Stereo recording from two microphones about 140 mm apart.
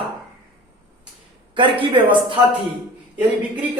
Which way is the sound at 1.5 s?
35° right (ahead or behind).